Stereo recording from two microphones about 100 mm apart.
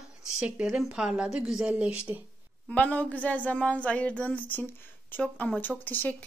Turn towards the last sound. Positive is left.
turn(degrees=20)  # may be behind; listen again after turning